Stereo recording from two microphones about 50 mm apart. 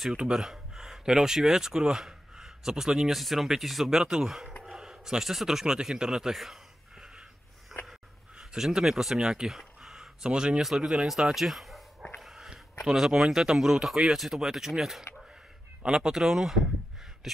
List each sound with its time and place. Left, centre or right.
0.1 s speech: centre
6.3 s a sound: centre
8.4 s speech: centre
12.2 s biting: centre
12.8 s speech: centre